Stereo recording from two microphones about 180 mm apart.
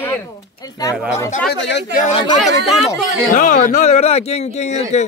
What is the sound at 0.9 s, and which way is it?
Speech, 5° right (ahead or behind).